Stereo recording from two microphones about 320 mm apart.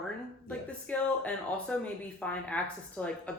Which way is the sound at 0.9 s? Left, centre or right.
Centre.